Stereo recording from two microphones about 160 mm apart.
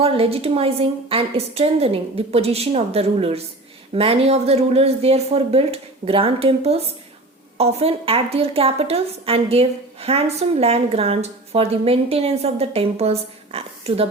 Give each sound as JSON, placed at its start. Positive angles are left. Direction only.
{"t": 0.0, "sound": "a woman's voice", "side_deg": -35}